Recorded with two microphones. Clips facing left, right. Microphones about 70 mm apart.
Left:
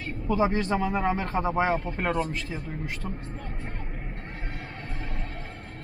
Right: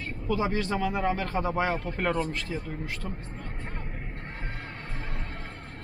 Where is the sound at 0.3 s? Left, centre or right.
Left.